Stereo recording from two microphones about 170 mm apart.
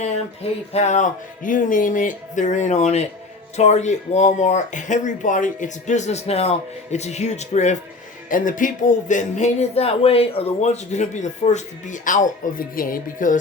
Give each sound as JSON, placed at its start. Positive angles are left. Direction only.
{"t": 0.7, "sound": "speech", "side_deg": 40}